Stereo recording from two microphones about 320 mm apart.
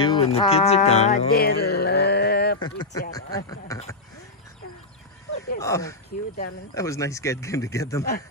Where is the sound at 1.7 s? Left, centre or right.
Left.